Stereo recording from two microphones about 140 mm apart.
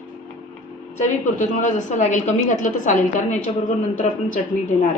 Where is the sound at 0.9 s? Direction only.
65° left (ahead or behind).